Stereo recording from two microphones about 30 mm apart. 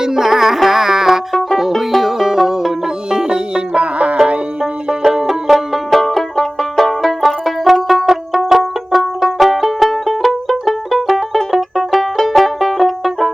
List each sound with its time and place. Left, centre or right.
0.0 s music: centre
3.1 s music: right
3.9 s music: right
5.2 s banjo: centre
8.0 s music: centre